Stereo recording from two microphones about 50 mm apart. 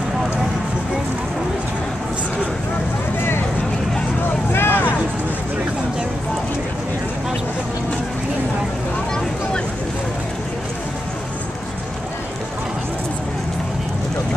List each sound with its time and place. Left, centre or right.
4.5 s vehicle: left